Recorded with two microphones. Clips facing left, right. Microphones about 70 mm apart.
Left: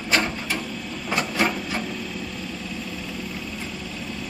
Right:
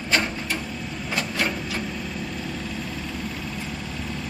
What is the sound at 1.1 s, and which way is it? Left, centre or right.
Printer, centre.